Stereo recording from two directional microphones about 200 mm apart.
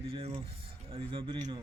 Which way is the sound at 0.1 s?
30° right (ahead or behind).